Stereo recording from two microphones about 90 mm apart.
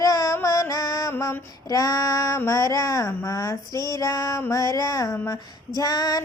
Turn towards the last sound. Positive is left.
turn(degrees=45)  # may be behind; listen again after turning